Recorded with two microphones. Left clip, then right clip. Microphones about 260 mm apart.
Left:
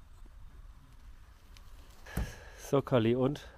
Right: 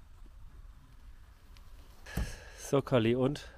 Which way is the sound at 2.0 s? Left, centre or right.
Centre.